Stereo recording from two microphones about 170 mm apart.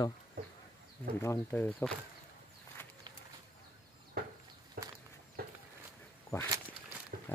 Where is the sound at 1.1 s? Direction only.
15° left (ahead or behind).